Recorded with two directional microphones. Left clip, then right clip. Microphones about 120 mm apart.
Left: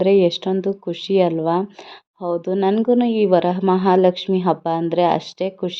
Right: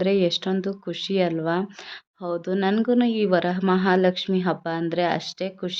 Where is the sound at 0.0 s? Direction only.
25° left (ahead or behind).